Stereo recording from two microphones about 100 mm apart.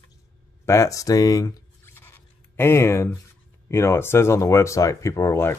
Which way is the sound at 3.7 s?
25° left (ahead or behind).